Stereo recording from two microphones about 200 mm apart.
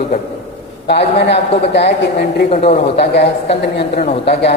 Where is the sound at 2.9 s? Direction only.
55° left (ahead or behind).